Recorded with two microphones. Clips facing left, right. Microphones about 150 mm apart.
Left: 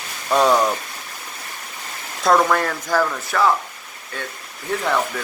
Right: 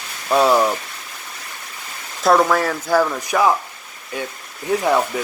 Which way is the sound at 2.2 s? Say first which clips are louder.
Right 2 dB; 5° right (ahead or behind).